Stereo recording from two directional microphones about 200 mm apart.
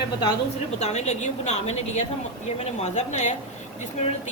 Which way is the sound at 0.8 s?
35° left (ahead or behind).